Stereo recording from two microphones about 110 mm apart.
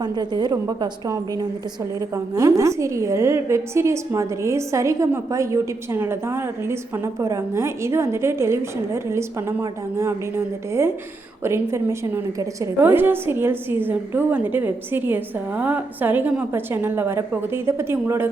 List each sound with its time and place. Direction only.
0.0 s a woman's voice: 40° right (ahead or behind)
12.8 s a woman's voice: 20° right (ahead or behind)